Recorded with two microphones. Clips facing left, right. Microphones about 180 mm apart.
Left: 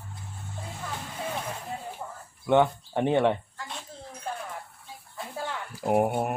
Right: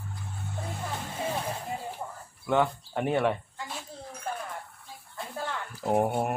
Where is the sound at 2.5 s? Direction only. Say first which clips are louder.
Left 4 dB; 20° left (ahead or behind).